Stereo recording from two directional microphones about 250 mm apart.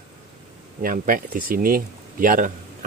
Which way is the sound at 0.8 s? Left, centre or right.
Right.